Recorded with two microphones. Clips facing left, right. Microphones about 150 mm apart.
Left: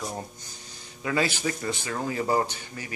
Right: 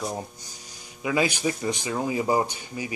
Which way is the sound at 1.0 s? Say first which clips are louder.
Right 2 dB; 15° right (ahead or behind).